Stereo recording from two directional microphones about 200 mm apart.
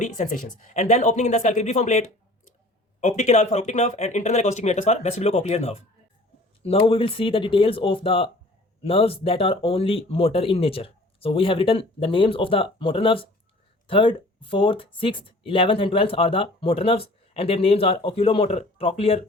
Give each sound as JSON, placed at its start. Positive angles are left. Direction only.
{"t": 0.0, "sound": "speech", "side_deg": 40}
{"t": 3.0, "sound": "speech", "side_deg": 35}